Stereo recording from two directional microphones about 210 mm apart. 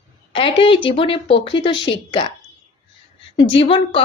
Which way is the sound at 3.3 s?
25° left (ahead or behind).